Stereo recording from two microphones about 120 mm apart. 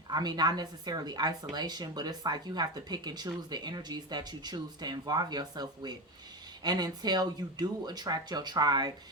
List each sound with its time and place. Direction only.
0.1 s a woman's voice: 35° right (ahead or behind)